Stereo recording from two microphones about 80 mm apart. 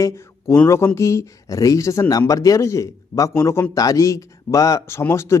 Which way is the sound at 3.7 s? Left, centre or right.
Left.